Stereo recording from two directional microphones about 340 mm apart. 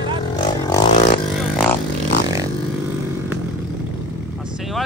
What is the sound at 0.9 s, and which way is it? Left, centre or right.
Vehicle, left.